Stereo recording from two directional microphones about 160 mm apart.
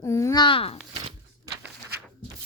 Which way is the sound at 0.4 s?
35° left (ahead or behind).